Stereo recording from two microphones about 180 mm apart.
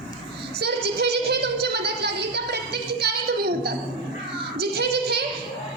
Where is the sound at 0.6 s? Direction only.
65° right (ahead or behind).